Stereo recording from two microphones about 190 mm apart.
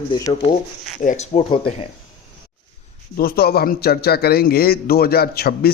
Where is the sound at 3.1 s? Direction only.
55° left (ahead or behind).